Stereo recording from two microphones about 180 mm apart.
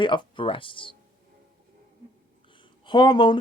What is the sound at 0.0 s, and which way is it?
Speech, 25° left (ahead or behind).